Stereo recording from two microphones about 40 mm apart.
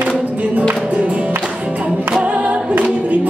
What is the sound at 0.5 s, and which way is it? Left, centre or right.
Music, right.